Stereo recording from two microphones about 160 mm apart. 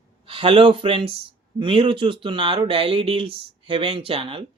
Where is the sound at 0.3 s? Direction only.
35° right (ahead or behind).